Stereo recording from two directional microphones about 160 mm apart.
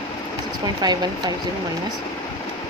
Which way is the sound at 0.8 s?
25° right (ahead or behind).